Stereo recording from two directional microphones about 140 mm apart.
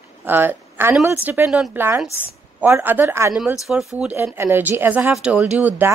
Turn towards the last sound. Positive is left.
turn(degrees=-10)  # may be behind; listen again after turning